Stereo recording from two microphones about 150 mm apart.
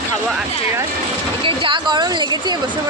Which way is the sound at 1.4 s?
35° right (ahead or behind).